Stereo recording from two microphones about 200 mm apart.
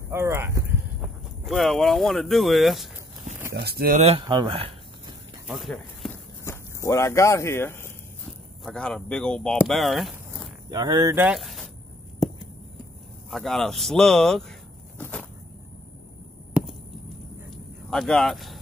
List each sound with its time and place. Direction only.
0.1 s speech: 10° right (ahead or behind)
1.0 s speech: centre (ahead or behind)
3.5 s speech: 50° right (ahead or behind)
4.2 s a man's voice: 20° right (ahead or behind)
5.5 s speech: centre (ahead or behind)
6.4 s speech: 15° left (ahead or behind)
10.7 s a man's voice: 20° right (ahead or behind)
11.2 s a sound: centre (ahead or behind)
13.3 s speech: centre (ahead or behind)
15.0 s a sound: 5° left (ahead or behind)
16.5 s a sound: centre (ahead or behind)
17.8 s speech: centre (ahead or behind)